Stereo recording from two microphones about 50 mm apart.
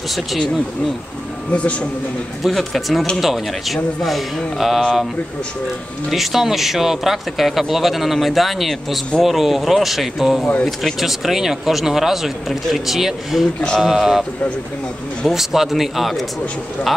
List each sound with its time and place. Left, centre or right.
1.5 s speech: left
2.4 s speech: centre
6.0 s speech: centre
15.2 s speech: centre